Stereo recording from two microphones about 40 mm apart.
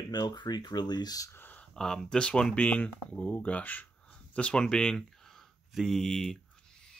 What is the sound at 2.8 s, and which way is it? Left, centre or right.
Speech, left.